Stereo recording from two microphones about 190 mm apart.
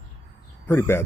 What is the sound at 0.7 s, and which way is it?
Speech, 15° left (ahead or behind).